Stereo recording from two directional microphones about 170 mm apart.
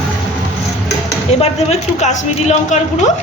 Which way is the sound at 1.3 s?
40° left (ahead or behind).